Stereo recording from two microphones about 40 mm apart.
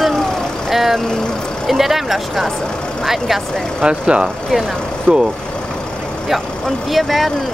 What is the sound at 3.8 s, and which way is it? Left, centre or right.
Speech, right.